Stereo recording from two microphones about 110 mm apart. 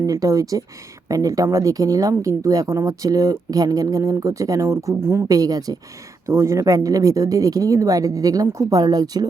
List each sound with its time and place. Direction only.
0.0 s speech: 30° right (ahead or behind)